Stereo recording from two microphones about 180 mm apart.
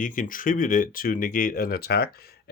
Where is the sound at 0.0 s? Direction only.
50° left (ahead or behind).